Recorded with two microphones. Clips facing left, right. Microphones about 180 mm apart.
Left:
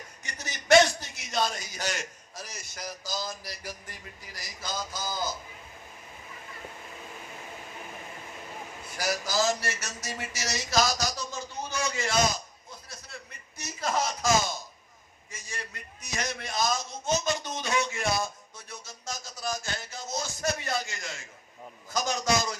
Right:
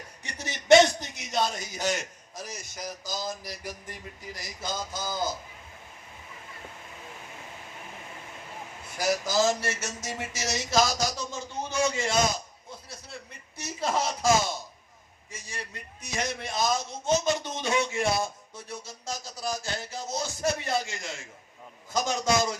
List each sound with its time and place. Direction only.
0.2 s a sound: 30° right (ahead or behind)
2.3 s a man's voice: 20° right (ahead or behind)
9.0 s a man's voice: 25° right (ahead or behind)
13.6 s a man's voice: 30° right (ahead or behind)
21.9 s a man's voice: 25° right (ahead or behind)